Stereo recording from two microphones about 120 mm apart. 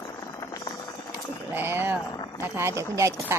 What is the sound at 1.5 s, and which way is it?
Speech, 20° right (ahead or behind).